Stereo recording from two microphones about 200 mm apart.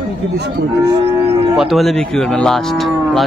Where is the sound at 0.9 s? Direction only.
30° right (ahead or behind).